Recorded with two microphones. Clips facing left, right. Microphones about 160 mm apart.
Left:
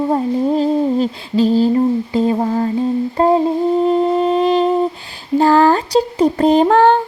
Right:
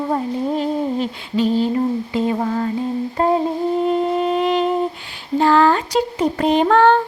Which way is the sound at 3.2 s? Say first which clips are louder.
Left 4 dB; 35° left (ahead or behind).